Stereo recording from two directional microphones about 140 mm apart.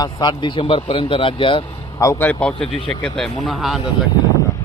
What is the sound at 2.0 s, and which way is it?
A man's voice, 20° left (ahead or behind).